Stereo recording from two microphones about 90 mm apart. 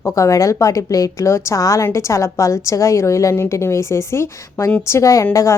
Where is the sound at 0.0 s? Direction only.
35° left (ahead or behind).